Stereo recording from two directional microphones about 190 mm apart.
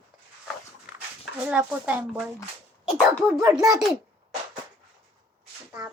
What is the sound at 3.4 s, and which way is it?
Speech, 15° right (ahead or behind).